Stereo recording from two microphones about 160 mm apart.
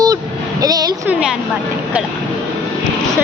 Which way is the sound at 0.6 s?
25° right (ahead or behind).